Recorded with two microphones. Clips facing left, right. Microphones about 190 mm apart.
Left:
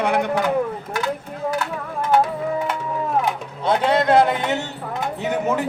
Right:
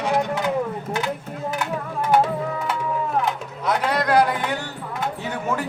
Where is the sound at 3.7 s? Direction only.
25° left (ahead or behind).